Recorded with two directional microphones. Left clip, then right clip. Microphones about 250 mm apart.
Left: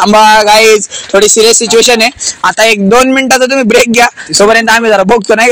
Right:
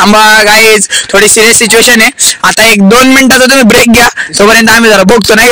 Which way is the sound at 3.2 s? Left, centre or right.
Right.